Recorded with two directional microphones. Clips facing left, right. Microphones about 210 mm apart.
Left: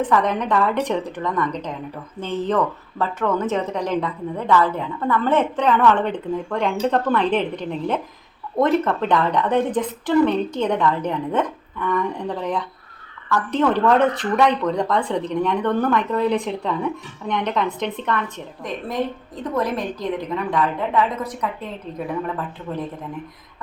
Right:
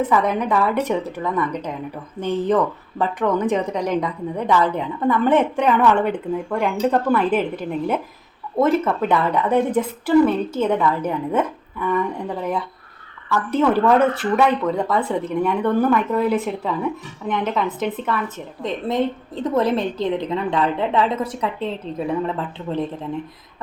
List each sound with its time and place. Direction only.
0.1 s speech: 10° right (ahead or behind)
18.6 s a woman's voice: 25° right (ahead or behind)